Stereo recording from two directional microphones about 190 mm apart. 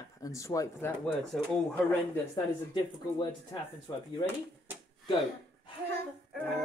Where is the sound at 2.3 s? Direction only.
25° left (ahead or behind).